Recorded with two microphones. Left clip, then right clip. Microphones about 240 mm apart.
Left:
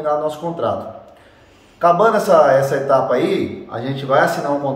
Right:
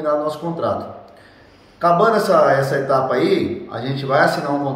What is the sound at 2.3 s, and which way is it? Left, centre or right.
A man's voice, centre.